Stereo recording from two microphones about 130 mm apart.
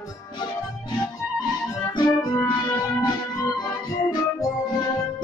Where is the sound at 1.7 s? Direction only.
20° left (ahead or behind).